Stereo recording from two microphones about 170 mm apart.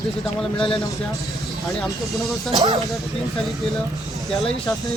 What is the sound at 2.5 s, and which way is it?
Speech, 25° right (ahead or behind).